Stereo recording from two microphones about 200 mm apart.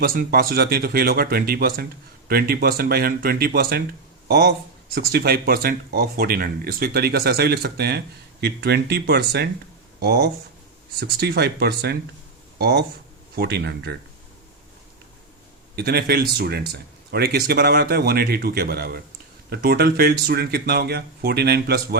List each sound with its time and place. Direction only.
0.0 s speech: 45° right (ahead or behind)
15.7 s speech: 50° right (ahead or behind)